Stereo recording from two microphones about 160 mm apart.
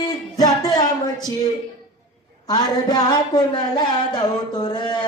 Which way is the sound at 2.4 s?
25° left (ahead or behind).